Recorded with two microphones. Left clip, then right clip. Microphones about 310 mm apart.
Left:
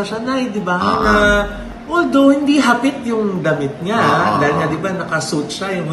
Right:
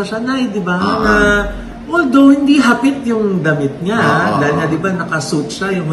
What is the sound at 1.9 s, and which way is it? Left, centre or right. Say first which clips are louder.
A man's voice: right 2 dB; centre.